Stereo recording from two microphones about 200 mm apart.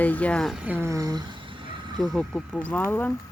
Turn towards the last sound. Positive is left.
turn(degrees=10)  # may be behind; listen again after turning